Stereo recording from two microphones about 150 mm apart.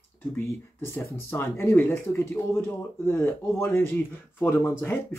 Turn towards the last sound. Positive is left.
turn(degrees=15)  # may be behind; listen again after turning